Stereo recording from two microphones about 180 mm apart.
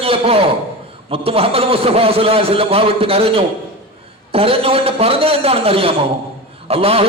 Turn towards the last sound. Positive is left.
turn(degrees=-35)  # may be behind; listen again after turning